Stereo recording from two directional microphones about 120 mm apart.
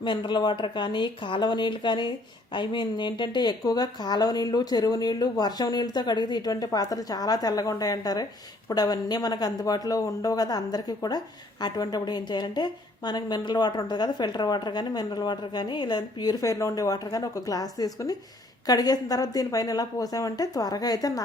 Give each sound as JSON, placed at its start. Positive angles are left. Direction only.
{"t": 0.0, "sound": "a woman's voice", "side_deg": 40}